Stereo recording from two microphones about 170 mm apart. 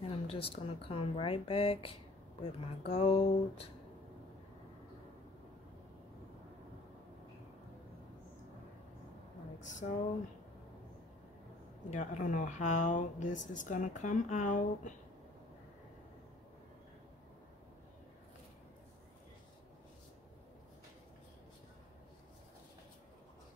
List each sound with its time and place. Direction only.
0.0 s speech: 35° left (ahead or behind)
9.6 s speech: 45° left (ahead or behind)
11.9 s speech: 45° left (ahead or behind)